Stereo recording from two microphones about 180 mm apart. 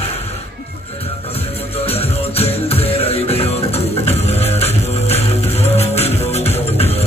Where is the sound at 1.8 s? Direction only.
35° left (ahead or behind).